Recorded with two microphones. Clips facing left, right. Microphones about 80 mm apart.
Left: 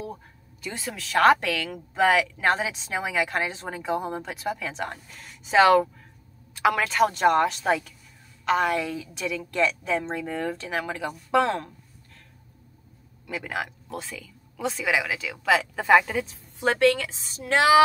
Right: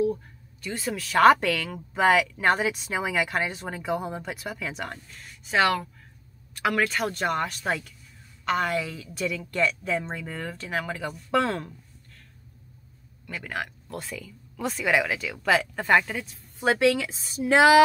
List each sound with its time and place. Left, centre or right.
0.6 s speech: centre
4.9 s speech: centre
6.5 s speech: centre
13.3 s speech: centre